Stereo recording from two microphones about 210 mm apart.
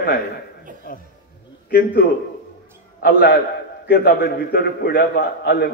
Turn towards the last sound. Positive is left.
turn(degrees=50)  # may be behind; listen again after turning